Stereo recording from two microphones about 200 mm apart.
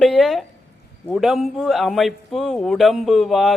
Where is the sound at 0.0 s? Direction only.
Centre (ahead or behind).